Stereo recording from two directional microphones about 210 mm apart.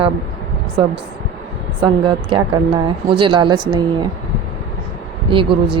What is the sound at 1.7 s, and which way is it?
A woman's voice, 20° right (ahead or behind).